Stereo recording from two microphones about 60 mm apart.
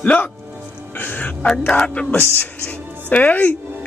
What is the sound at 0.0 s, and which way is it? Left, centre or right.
Speech, left.